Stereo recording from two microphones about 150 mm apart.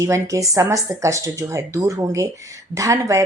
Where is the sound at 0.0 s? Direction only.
20° right (ahead or behind).